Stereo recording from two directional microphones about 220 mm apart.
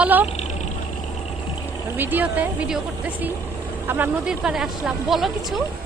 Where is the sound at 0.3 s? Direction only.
30° left (ahead or behind).